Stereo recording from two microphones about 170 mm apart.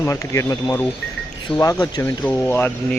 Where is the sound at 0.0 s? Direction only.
15° left (ahead or behind).